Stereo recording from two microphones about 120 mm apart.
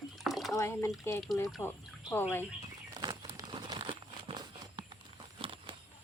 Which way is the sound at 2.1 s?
20° left (ahead or behind).